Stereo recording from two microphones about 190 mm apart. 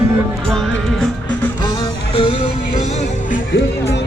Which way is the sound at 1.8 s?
30° left (ahead or behind).